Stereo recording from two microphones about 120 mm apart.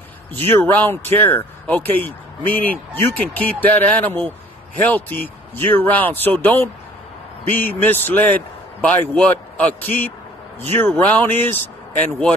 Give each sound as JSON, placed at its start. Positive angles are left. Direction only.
{"t": 0.5, "sound": "speech", "side_deg": 20}